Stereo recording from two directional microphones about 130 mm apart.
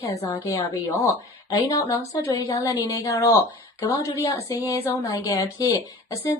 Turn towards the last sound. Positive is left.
turn(degrees=25)  # may be behind; listen again after turning